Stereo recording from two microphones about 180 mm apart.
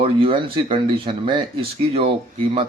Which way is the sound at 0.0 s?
30° right (ahead or behind).